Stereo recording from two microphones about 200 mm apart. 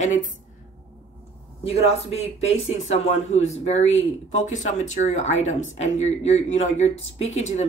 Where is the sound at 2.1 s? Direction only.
30° left (ahead or behind).